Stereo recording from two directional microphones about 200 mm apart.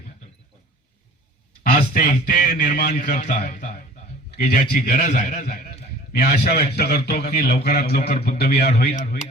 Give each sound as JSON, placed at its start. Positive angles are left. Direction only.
{"t": 1.7, "sound": "a man's voice", "side_deg": 40}
{"t": 4.7, "sound": "a man's voice", "side_deg": 40}